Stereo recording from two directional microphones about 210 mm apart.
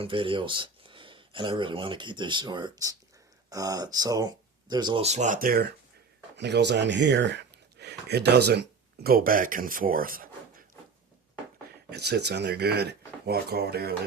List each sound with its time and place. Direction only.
0.0 s speech: 25° right (ahead or behind); by 10.2 s 40° right (ahead or behind)
11.9 s speech: 50° right (ahead or behind)